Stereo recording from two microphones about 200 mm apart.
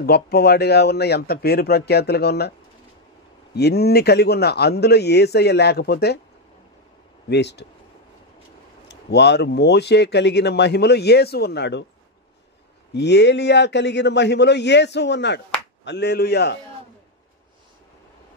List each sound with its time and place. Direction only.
0.0 s speech: 50° left (ahead or behind)
3.5 s a man's voice: 55° left (ahead or behind)
7.2 s a man's voice: 60° left (ahead or behind)
8.8 s a man's voice: 60° left (ahead or behind)
12.9 s a man's voice: 60° left (ahead or behind)